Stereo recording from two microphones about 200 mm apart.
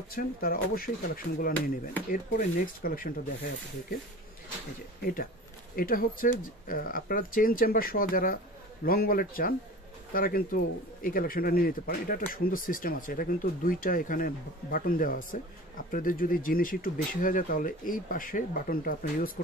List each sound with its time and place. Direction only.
0.1 s speech: 45° left (ahead or behind)
5.0 s speech: 45° left (ahead or behind)